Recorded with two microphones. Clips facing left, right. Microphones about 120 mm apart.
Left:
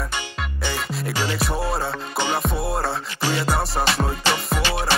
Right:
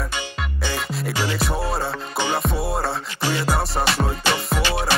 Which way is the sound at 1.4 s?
Centre (ahead or behind).